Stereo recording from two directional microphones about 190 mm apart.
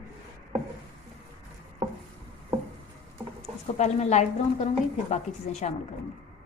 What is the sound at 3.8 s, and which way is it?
A woman's voice, 35° left (ahead or behind).